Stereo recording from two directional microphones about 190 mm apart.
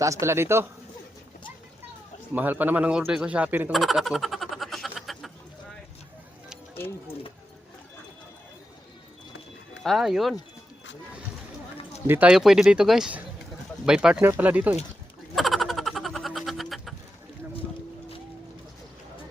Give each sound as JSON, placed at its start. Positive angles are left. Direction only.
{"t": 0.0, "sound": "speech", "side_deg": -15}
{"t": 2.3, "sound": "speech", "side_deg": -10}
{"t": 6.7, "sound": "speech", "side_deg": 10}
{"t": 9.8, "sound": "speech", "side_deg": 0}
{"t": 12.0, "sound": "speech", "side_deg": -10}
{"t": 15.4, "sound": "a sound", "side_deg": 0}